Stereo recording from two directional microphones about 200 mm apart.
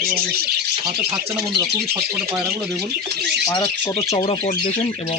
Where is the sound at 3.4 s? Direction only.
15° left (ahead or behind).